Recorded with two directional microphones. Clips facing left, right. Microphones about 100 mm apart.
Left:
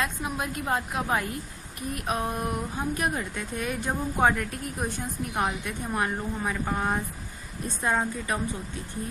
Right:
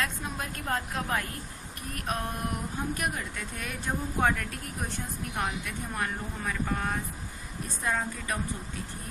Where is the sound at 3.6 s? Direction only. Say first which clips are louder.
Left 4 dB; 20° left (ahead or behind).